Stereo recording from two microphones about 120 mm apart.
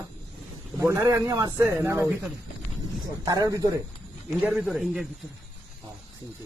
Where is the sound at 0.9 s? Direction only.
20° right (ahead or behind).